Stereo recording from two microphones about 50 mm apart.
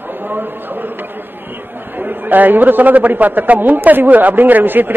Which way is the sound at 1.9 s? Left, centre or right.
Right.